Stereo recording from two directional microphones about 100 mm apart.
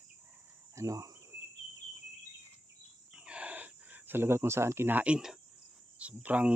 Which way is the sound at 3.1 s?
10° right (ahead or behind).